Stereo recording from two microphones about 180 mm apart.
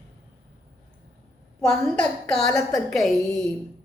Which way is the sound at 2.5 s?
20° left (ahead or behind).